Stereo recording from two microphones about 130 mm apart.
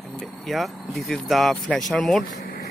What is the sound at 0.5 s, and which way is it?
Speech, centre (ahead or behind).